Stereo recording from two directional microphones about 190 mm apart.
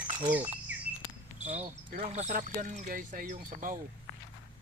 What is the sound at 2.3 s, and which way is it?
Speech, 40° right (ahead or behind).